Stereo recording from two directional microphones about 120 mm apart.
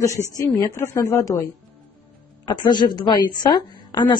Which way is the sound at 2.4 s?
40° left (ahead or behind).